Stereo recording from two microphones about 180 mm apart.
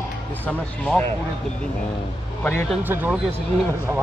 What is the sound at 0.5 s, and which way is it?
Speech, 5° left (ahead or behind).